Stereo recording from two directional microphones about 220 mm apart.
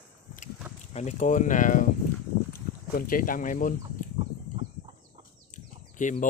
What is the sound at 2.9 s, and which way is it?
Speech, 40° left (ahead or behind).